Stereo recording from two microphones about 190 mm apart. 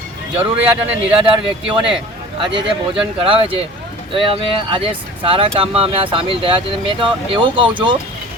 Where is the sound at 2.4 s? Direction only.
25° right (ahead or behind).